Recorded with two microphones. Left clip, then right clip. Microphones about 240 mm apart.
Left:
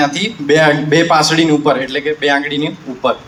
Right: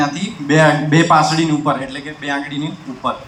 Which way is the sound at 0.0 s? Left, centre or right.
Left.